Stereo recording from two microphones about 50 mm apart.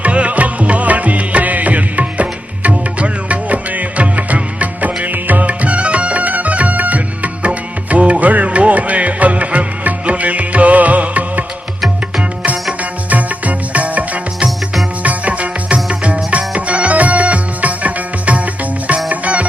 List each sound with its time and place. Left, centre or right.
0.0 s music: right
11.8 s music: centre
12.8 s music: right
14.4 s music: centre
15.0 s music: right